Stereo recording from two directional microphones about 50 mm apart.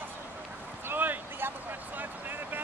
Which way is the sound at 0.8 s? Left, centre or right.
Right.